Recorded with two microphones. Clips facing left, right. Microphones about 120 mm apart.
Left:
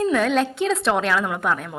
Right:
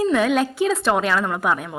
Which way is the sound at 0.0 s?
5° right (ahead or behind).